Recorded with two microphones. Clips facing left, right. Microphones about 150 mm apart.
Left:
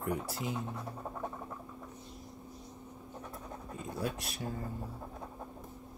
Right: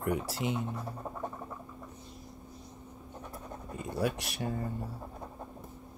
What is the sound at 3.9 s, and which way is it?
Speech, 75° right (ahead or behind).